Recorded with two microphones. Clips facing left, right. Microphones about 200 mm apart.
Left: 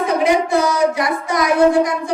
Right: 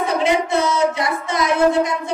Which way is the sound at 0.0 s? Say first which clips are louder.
Left 2 dB; 25° right (ahead or behind).